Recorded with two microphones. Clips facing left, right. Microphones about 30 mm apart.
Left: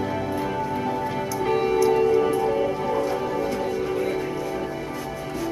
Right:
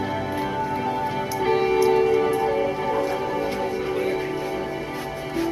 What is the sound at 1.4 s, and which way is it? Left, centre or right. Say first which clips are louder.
Music: right 1 dB; right.